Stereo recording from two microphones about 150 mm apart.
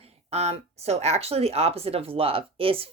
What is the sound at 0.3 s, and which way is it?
Speech, 45° right (ahead or behind).